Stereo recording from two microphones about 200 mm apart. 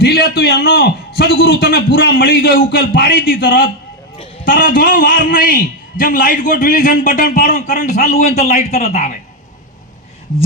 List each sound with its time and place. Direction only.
0.0 s a man's voice: 50° left (ahead or behind); by 9.1 s 35° left (ahead or behind)